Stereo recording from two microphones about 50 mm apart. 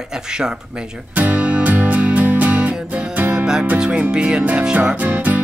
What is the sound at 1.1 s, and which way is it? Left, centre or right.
Music, right.